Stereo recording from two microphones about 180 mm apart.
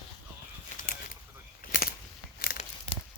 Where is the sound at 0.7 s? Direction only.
45° left (ahead or behind).